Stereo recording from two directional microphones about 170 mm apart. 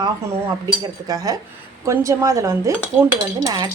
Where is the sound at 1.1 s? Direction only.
20° right (ahead or behind).